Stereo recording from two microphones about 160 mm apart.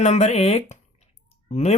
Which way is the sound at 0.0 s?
45° left (ahead or behind).